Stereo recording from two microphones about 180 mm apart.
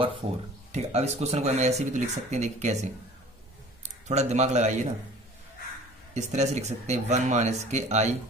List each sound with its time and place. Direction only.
0.7 s a man's voice: 35° right (ahead or behind)
6.1 s speech: 40° right (ahead or behind)